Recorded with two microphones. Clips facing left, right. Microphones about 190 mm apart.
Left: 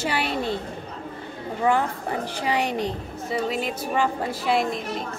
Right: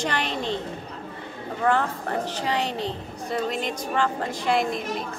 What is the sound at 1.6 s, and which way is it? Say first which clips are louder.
A woman's voice: left 1 dB; 10° left (ahead or behind).